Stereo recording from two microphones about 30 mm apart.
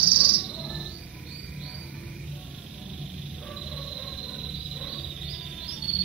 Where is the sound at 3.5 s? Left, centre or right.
Centre.